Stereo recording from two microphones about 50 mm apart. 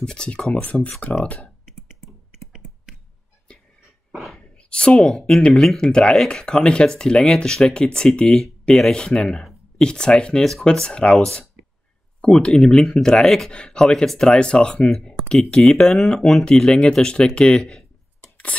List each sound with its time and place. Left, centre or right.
0.0 s speech: centre
0.6 s speech: left
1.7 s a sound: centre
3.5 s a sound: left
5.2 s speech: centre
5.5 s speech: centre
5.8 s speech: centre
14.9 s speech: centre
15.9 s speech: centre
18.5 s a sound: left